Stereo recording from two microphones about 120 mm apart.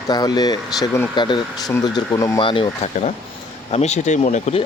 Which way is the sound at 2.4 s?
45° left (ahead or behind).